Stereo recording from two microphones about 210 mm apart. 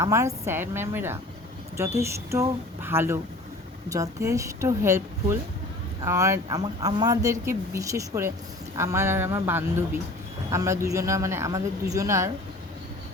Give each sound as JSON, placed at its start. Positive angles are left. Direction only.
{"t": 0.0, "sound": "speech", "side_deg": -15}